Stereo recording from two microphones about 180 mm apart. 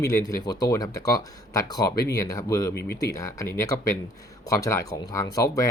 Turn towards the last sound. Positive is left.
turn(degrees=20)  # may be behind; listen again after turning